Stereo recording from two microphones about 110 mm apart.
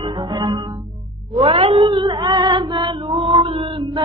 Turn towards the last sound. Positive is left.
turn(degrees=-55)  # may be behind; listen again after turning